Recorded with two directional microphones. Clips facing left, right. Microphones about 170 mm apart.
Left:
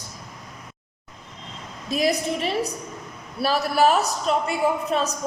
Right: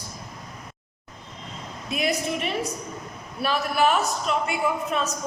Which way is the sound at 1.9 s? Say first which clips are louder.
Left 3 dB; 35° left (ahead or behind).